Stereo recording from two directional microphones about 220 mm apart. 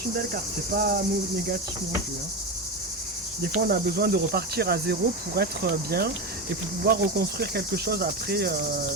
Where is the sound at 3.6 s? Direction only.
45° right (ahead or behind).